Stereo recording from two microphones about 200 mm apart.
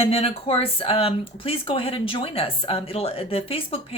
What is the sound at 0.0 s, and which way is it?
Speech, 30° left (ahead or behind).